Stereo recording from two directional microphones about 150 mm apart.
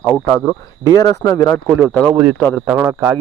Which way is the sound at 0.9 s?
25° left (ahead or behind).